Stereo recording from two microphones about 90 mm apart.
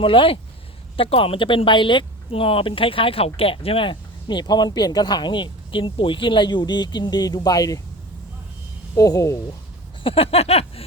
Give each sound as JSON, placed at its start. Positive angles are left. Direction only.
{"t": 0.0, "sound": "speech", "side_deg": 75}
{"t": 0.9, "sound": "speech", "side_deg": 90}
{"t": 9.0, "sound": "speech", "side_deg": 40}
{"t": 10.0, "sound": "a sound", "side_deg": 90}